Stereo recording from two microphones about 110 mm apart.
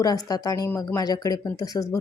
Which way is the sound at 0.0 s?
35° left (ahead or behind).